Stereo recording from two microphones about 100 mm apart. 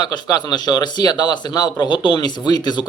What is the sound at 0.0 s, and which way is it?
Speech, 40° left (ahead or behind).